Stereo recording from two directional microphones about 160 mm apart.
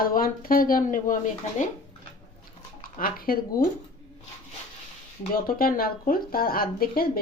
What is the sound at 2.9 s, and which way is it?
Speech, 65° left (ahead or behind).